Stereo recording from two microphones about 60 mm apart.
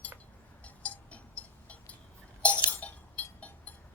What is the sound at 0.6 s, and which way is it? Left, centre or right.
Cowbell, left.